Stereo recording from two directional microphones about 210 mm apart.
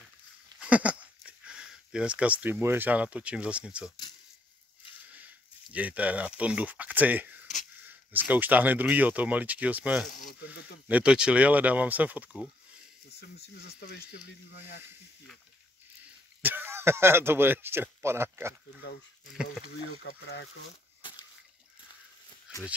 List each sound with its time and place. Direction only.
0.6 s speech: 5° right (ahead or behind)
5.1 s speech: 5° right (ahead or behind)
13.7 s speech: 50° left (ahead or behind)
16.4 s speech: 10° right (ahead or behind)
20.0 s speech: 60° left (ahead or behind)